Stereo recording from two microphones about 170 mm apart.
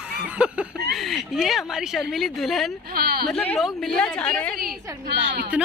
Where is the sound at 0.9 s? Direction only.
Centre (ahead or behind).